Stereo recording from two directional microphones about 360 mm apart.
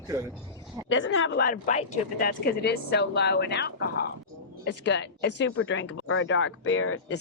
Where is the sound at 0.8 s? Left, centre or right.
Left.